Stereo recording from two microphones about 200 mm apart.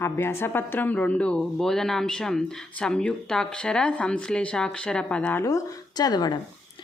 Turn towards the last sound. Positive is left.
turn(degrees=20)  # may be behind; listen again after turning